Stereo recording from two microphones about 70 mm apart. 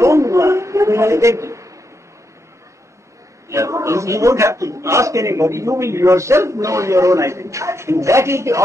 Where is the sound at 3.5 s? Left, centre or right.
Right.